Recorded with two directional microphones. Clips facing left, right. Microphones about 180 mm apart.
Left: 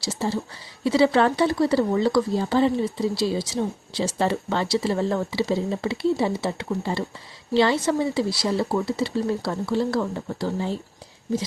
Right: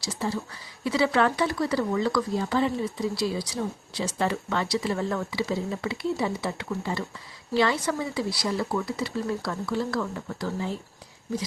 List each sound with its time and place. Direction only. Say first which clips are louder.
0.0 s speech: left 4 dB; 30° left (ahead or behind)